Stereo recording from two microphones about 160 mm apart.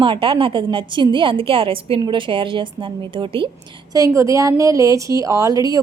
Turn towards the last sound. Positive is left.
turn(degrees=-20)  # may be behind; listen again after turning